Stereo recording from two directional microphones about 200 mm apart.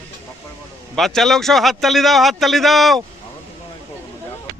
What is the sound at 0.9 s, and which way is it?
A man's voice, centre (ahead or behind).